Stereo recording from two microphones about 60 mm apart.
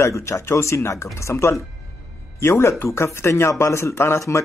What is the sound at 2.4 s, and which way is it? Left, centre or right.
Speech, left.